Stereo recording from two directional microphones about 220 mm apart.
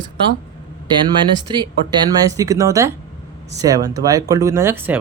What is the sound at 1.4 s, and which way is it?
Speech, 20° right (ahead or behind).